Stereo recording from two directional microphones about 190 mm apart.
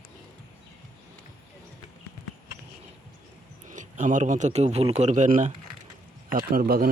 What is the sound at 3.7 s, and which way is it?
Speech, 40° right (ahead or behind).